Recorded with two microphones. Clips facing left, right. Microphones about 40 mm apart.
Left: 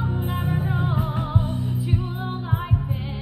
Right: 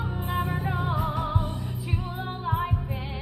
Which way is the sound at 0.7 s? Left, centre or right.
Left.